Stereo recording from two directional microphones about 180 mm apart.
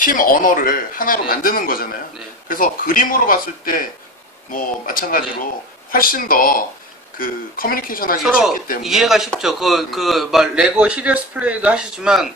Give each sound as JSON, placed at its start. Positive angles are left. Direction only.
{"t": 0.0, "sound": "speech", "side_deg": 50}
{"t": 8.2, "sound": "a man's voice", "side_deg": 0}